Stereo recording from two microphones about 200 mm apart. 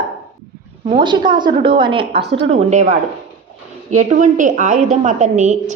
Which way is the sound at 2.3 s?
30° right (ahead or behind).